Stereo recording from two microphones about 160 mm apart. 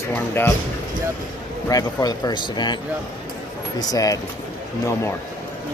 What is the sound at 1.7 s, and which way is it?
Speech, 25° left (ahead or behind).